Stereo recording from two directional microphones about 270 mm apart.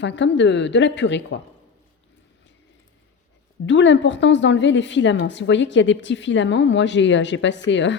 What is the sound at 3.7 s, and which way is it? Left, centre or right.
A woman's voice, left.